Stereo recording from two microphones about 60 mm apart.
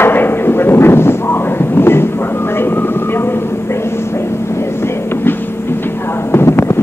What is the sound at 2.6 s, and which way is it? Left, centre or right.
Train, left.